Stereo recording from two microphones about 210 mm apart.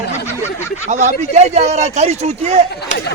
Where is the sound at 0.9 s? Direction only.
35° right (ahead or behind).